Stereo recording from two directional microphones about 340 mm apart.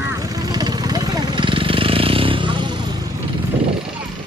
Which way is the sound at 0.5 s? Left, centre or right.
Centre.